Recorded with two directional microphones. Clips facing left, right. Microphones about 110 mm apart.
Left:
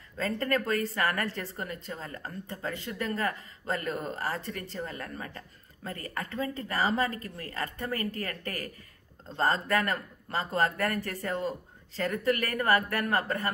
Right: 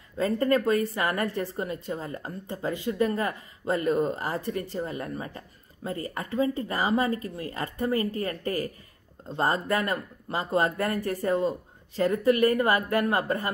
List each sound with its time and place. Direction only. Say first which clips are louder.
0.2 s speech: right 6 dB; 15° right (ahead or behind)